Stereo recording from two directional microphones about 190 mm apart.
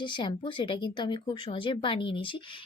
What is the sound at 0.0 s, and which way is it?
A woman's voice, 25° left (ahead or behind).